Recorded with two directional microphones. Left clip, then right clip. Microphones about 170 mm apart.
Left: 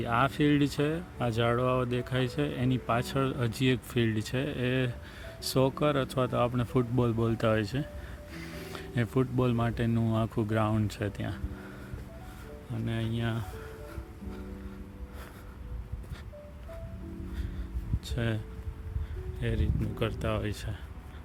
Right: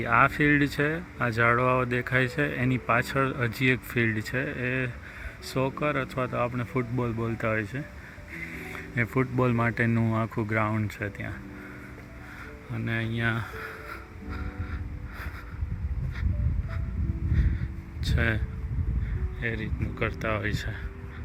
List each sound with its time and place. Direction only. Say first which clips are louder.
0.0 s speech: right 5 dB; 10° left (ahead or behind); by 7.9 s 25° left (ahead or behind)
8.3 s music: right 5 dB; 35° left (ahead or behind)
9.2 s speech: right 4 dB; 5° left (ahead or behind); by 11.3 s 25° left (ahead or behind)
12.7 s speech: right 5 dB; 10° left (ahead or behind)
13.4 s music: right 7 dB; centre (ahead or behind)
18.0 s a sound: right 7 dB; 10° left (ahead or behind)
19.4 s speech: right 3 dB; 25° left (ahead or behind)